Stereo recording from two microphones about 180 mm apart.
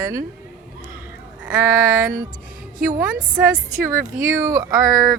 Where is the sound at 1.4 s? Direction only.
10° right (ahead or behind).